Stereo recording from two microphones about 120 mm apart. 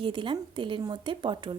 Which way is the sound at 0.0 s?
45° right (ahead or behind).